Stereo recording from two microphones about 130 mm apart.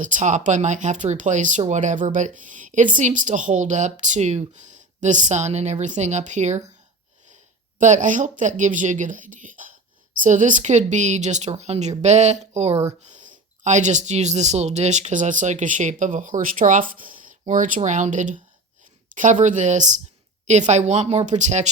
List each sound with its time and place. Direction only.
0.0 s speech: 75° right (ahead or behind)
7.8 s speech: 75° right (ahead or behind)
17.8 s speech: 70° right (ahead or behind)